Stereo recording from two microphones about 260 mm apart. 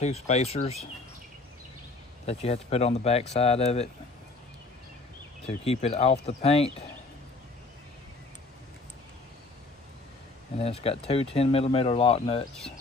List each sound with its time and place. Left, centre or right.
0.0 s speech: left
2.2 s speech: left
5.6 s speech: left
10.6 s speech: left